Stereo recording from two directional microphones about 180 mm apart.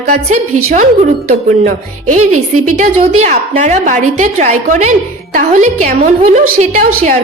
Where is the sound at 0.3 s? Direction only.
45° right (ahead or behind).